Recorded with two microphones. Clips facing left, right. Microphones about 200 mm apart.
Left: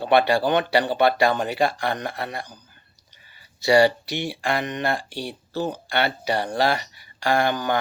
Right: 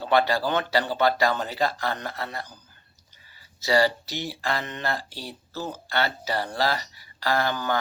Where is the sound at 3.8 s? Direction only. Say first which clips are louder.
Left 5 dB; 65° left (ahead or behind).